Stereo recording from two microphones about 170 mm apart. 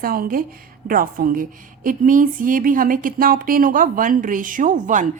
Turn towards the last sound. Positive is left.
turn(degrees=-50)  # may be behind; listen again after turning